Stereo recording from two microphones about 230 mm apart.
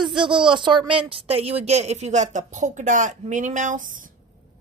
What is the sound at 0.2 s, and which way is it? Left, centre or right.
A woman's voice, right.